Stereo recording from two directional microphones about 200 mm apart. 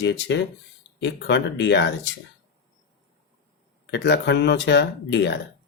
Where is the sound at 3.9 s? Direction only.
60° left (ahead or behind).